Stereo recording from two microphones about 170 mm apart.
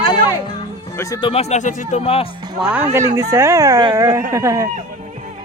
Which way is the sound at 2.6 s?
5° right (ahead or behind).